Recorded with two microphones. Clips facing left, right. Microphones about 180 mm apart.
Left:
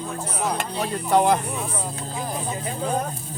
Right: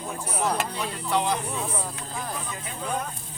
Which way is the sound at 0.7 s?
45° left (ahead or behind).